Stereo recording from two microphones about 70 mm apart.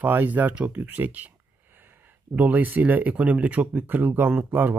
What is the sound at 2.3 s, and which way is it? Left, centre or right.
Speech, right.